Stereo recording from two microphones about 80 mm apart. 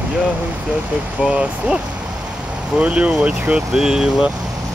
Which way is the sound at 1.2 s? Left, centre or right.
Centre.